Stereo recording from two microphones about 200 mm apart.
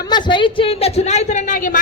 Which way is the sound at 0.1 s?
25° left (ahead or behind).